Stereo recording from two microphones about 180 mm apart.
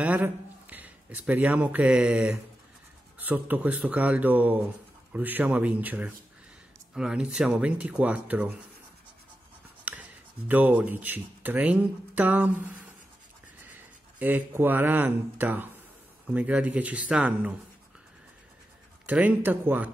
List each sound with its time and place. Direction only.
0.0 s a man's voice: 10° right (ahead or behind)
9.9 s a sound: 10° right (ahead or behind)
10.5 s speech: 10° right (ahead or behind)
14.1 s speech: 10° right (ahead or behind)
19.0 s speech: 10° right (ahead or behind)